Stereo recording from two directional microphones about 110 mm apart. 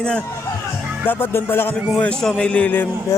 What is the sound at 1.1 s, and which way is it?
Speech, 20° left (ahead or behind).